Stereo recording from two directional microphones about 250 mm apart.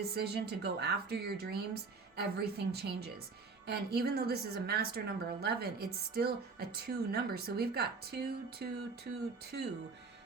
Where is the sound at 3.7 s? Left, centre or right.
Right.